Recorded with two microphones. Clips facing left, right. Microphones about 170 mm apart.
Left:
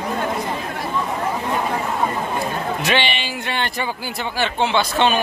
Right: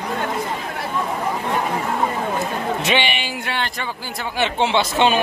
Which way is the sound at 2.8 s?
15° right (ahead or behind).